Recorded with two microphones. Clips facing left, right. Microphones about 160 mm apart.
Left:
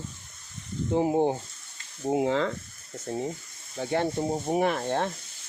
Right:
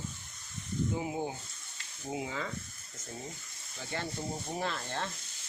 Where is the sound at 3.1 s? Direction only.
55° left (ahead or behind).